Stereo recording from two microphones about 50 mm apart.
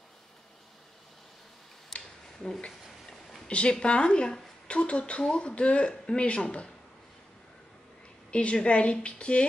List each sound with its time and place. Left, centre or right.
1.9 s a sound: centre
2.3 s speech: centre
3.4 s a man's voice: left
8.3 s a woman's voice: left